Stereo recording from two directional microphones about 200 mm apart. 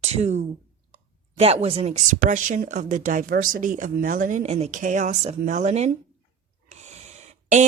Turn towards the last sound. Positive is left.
turn(degrees=-35)  # may be behind; listen again after turning